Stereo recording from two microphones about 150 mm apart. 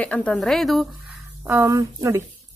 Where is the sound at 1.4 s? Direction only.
20° right (ahead or behind).